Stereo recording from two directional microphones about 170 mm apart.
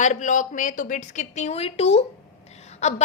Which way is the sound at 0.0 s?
45° left (ahead or behind).